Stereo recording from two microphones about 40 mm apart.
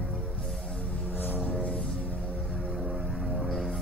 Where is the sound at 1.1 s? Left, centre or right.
Left.